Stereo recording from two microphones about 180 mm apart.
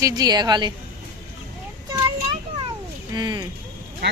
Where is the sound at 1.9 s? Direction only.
25° right (ahead or behind).